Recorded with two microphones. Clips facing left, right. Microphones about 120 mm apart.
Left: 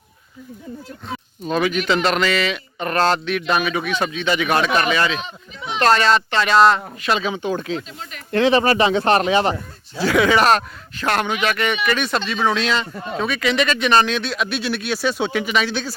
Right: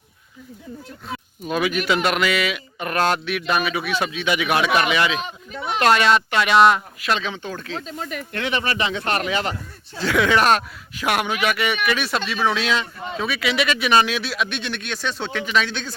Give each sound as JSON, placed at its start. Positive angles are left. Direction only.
{"t": 1.5, "sound": "speech", "side_deg": -5}
{"t": 5.5, "sound": "a sound", "side_deg": -55}
{"t": 5.8, "sound": "speech", "side_deg": -5}
{"t": 7.1, "sound": "speech", "side_deg": 5}
{"t": 7.9, "sound": "speech", "side_deg": -50}
{"t": 8.3, "sound": "speech", "side_deg": 30}
{"t": 10.0, "sound": "speech", "side_deg": 5}
{"t": 10.9, "sound": "speech", "side_deg": -10}